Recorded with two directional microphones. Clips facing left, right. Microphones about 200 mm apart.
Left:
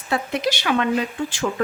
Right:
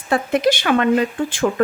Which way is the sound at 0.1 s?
50° right (ahead or behind).